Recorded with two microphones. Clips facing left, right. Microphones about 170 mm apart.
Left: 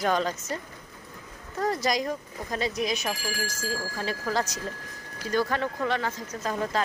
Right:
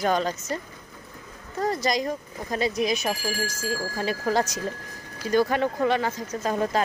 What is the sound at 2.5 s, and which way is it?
Speech, 5° right (ahead or behind).